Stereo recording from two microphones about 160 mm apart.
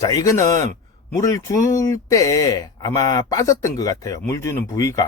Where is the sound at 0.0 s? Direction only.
20° left (ahead or behind).